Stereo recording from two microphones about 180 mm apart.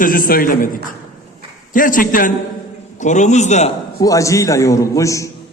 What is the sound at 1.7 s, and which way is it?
A man's voice, 50° left (ahead or behind).